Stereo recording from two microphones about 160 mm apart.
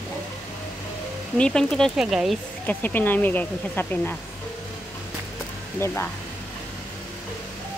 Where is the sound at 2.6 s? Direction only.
10° left (ahead or behind).